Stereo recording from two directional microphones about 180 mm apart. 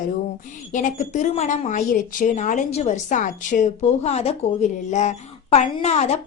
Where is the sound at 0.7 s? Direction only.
45° left (ahead or behind).